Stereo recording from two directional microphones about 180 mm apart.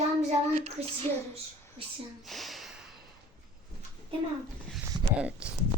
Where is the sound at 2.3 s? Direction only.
Centre (ahead or behind).